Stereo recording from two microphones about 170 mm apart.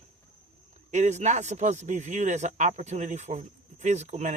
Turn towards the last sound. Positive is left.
turn(degrees=-45)  # may be behind; listen again after turning